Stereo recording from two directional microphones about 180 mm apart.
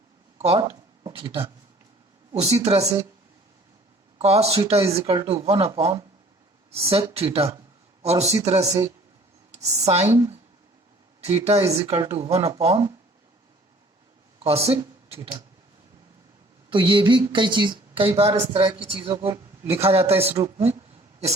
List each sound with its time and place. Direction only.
0.3 s a sound: 35° right (ahead or behind)
2.3 s speech: 35° right (ahead or behind)
4.2 s speech: 35° right (ahead or behind)
8.6 s speech: 20° right (ahead or behind)
9.5 s speech: 40° right (ahead or behind)
11.2 s speech: 35° right (ahead or behind)
14.3 s speech: 35° right (ahead or behind)
16.6 s speech: 25° right (ahead or behind)
20.4 s a sound: 35° right (ahead or behind)